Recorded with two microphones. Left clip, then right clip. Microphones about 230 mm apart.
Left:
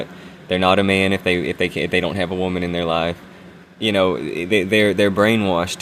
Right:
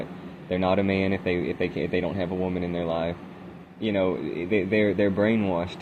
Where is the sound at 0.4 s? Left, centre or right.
Left.